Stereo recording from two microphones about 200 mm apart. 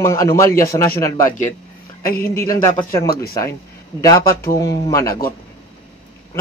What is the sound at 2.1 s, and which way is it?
Speech, 50° left (ahead or behind).